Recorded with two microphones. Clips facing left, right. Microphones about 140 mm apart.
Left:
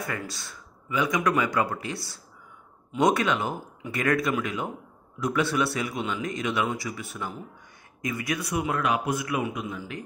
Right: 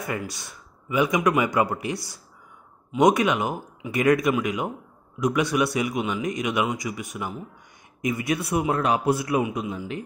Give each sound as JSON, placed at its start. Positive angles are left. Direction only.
{"t": 0.3, "sound": "speech", "side_deg": -20}
{"t": 3.0, "sound": "speech", "side_deg": -20}